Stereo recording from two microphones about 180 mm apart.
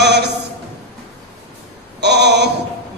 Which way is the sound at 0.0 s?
70° right (ahead or behind).